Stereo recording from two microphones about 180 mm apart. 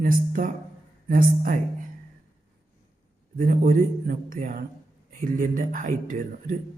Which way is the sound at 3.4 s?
50° right (ahead or behind).